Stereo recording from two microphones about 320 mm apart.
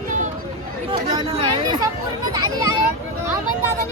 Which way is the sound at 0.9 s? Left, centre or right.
Centre.